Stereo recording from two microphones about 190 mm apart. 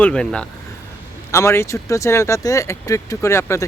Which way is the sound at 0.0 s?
5° left (ahead or behind).